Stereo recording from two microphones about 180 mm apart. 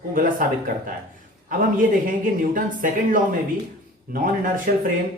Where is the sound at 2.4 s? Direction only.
50° right (ahead or behind).